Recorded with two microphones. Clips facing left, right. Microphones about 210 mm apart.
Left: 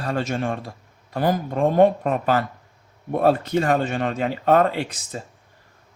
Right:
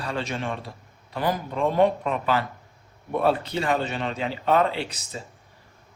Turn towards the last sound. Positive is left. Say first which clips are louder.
# left 4 dB
turn(degrees=50)  # may be behind; listen again after turning